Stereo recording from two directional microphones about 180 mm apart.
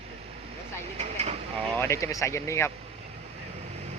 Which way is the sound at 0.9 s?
35° right (ahead or behind).